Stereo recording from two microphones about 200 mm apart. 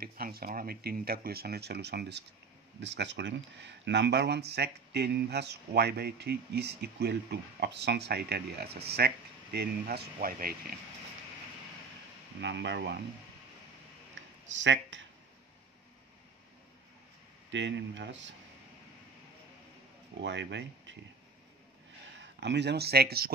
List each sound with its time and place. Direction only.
0.0 s speech: 50° right (ahead or behind)
12.4 s speech: 60° right (ahead or behind)
14.1 s a sound: 65° right (ahead or behind)
17.5 s speech: 65° right (ahead or behind)
20.2 s speech: 65° right (ahead or behind)
22.4 s speech: 60° right (ahead or behind)